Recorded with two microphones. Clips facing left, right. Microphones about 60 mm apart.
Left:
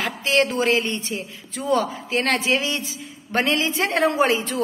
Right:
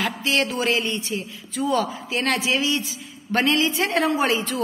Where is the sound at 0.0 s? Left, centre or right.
Left.